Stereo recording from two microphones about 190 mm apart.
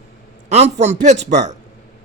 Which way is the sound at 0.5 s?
35° right (ahead or behind).